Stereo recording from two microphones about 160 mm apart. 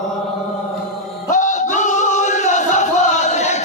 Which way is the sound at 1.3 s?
50° left (ahead or behind).